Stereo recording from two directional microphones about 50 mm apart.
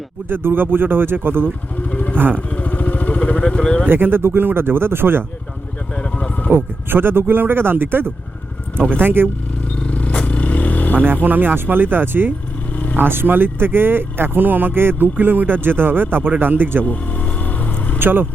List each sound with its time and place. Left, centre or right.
0.3 s speech: right
1.9 s vehicle: left
3.6 s speech: left
3.8 s speech: right
5.9 s vehicle: left
6.5 s speech: right
8.7 s speech: centre
9.0 s speech: right
9.8 s vehicle: left
11.0 s speech: right
12.7 s vehicle: left
13.0 s speech: right
16.8 s vehicle: left
18.0 s speech: right